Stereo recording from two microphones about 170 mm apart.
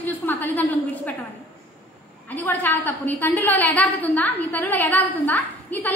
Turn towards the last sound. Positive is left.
turn(degrees=10)  # may be behind; listen again after turning